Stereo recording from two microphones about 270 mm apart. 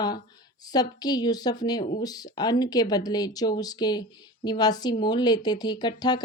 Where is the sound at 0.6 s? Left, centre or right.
Centre.